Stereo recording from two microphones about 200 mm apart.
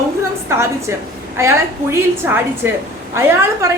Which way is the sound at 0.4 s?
10° right (ahead or behind).